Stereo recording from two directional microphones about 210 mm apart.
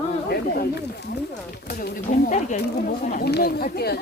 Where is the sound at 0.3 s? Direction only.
50° left (ahead or behind).